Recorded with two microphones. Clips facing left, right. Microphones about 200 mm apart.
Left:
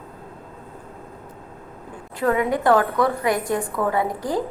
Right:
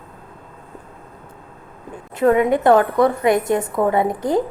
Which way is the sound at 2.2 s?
25° right (ahead or behind).